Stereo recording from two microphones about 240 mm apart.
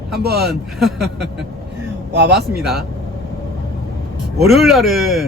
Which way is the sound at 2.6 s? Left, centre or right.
Centre.